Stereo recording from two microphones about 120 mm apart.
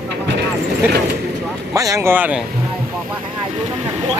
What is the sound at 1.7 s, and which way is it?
Speech, 25° right (ahead or behind).